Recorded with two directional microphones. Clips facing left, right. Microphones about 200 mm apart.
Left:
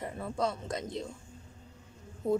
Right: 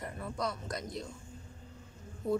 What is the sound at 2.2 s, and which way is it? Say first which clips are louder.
Speech: left 3 dB; 25° left (ahead or behind).